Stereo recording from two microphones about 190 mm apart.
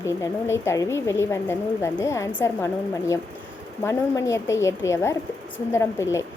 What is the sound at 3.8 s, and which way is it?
A woman's voice, 15° left (ahead or behind).